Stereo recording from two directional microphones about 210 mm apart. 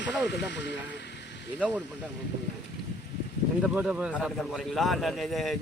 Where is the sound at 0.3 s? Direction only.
55° left (ahead or behind).